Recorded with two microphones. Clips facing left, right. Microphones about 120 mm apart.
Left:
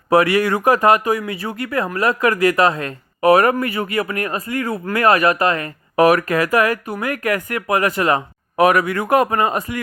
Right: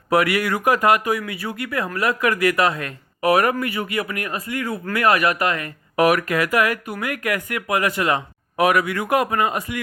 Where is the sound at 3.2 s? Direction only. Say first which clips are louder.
Left 5 dB; 45° left (ahead or behind).